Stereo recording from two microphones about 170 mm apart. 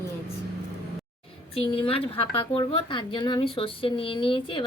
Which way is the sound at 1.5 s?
30° left (ahead or behind).